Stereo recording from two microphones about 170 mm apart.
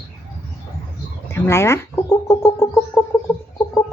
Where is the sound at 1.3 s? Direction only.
15° left (ahead or behind).